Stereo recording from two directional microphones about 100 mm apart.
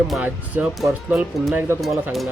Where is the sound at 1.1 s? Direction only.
15° right (ahead or behind).